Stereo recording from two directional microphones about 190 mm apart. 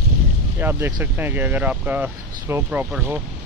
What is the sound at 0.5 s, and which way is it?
Speech, 10° right (ahead or behind).